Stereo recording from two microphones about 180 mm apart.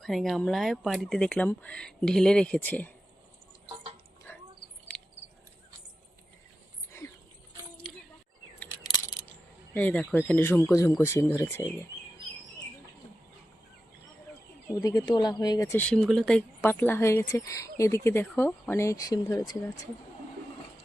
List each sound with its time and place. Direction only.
0.0 s speech: centre (ahead or behind)
9.7 s speech: 10° left (ahead or behind)
14.8 s speech: 20° left (ahead or behind)